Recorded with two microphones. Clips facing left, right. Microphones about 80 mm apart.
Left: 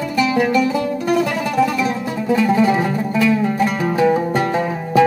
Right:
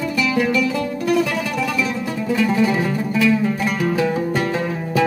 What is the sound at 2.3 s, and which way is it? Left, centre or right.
Music, left.